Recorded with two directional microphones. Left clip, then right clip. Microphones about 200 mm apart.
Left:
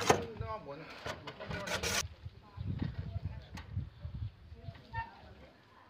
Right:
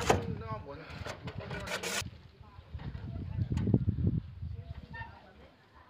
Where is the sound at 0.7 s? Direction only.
10° right (ahead or behind).